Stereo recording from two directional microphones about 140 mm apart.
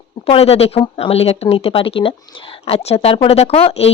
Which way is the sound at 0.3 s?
45° left (ahead or behind).